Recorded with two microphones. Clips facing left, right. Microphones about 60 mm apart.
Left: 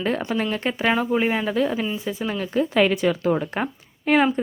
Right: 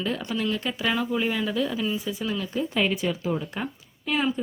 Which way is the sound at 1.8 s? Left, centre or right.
Left.